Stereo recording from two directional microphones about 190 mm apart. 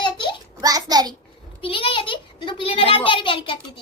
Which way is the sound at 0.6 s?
20° right (ahead or behind).